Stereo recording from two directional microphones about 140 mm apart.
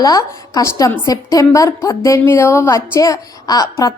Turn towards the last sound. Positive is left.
turn(degrees=25)  # may be behind; listen again after turning